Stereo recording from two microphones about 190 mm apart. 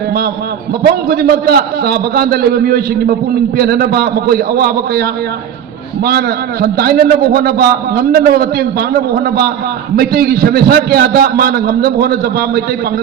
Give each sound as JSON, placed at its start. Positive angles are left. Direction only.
{"t": 1.0, "sound": "a man's voice", "side_deg": -55}
{"t": 6.1, "sound": "a man's voice", "side_deg": -55}